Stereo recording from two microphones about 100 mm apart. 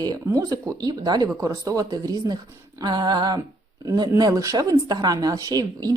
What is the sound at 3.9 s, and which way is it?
Speech, 40° right (ahead or behind).